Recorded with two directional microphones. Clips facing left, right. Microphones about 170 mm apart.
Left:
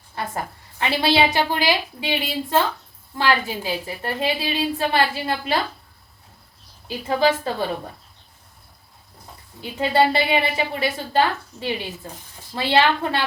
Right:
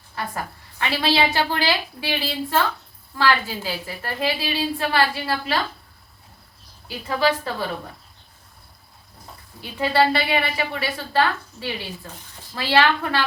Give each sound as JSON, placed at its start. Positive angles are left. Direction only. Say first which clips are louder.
{"t": 0.2, "sound": "a woman's voice", "louder": "left 1 dB", "side_deg": 20}
{"t": 9.6, "sound": "a woman's voice", "louder": "left 1 dB", "side_deg": 20}